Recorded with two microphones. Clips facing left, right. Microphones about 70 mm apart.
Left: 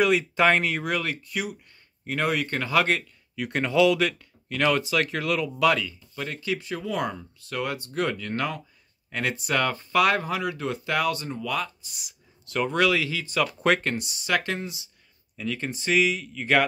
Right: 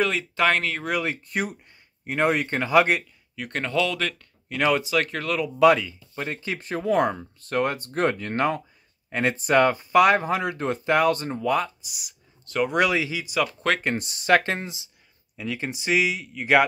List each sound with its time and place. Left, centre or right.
0.2 s speech: centre
1.2 s speech: right
2.0 s speech: right
3.3 s speech: centre
4.5 s speech: centre
5.6 s speech: right
11.9 s a sound: centre
12.7 s speech: right
13.5 s speech: centre
13.9 s speech: right
14.4 s speech: right
15.3 s speech: centre